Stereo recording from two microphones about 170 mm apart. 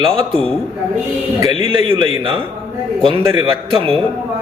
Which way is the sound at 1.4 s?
30° right (ahead or behind).